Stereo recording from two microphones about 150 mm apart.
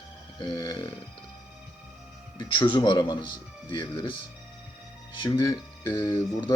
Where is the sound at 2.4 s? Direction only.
35° left (ahead or behind).